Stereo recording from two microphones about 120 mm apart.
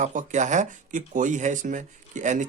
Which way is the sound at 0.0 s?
90° right.